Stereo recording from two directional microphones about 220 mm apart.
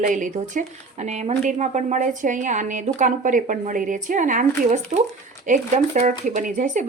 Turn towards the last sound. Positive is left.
turn(degrees=-35)  # may be behind; listen again after turning